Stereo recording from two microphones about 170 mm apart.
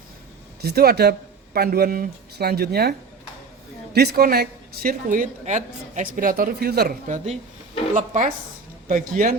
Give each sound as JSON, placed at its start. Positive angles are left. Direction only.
{"t": 0.6, "sound": "speech", "side_deg": -65}
{"t": 3.9, "sound": "a woman's voice", "side_deg": -65}
{"t": 7.9, "sound": "speech", "side_deg": -45}